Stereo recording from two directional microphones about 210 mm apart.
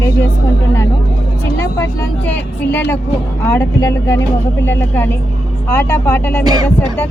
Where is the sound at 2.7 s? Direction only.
10° left (ahead or behind).